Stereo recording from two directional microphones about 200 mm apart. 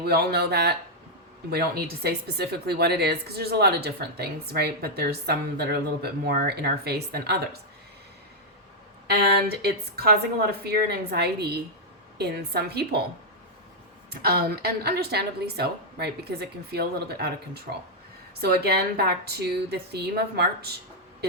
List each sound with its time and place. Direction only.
0.0 s speech: 50° right (ahead or behind)
9.0 s speech: 50° right (ahead or behind)
14.1 s speech: 50° right (ahead or behind)